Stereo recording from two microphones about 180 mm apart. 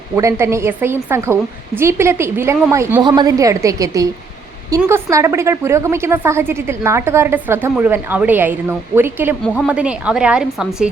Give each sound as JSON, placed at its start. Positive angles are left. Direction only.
{"t": 0.2, "sound": "a woman's voice", "side_deg": -15}
{"t": 3.0, "sound": "a woman's voice", "side_deg": -25}